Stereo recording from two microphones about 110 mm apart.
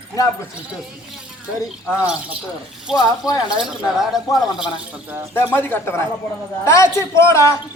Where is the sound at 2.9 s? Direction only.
5° right (ahead or behind).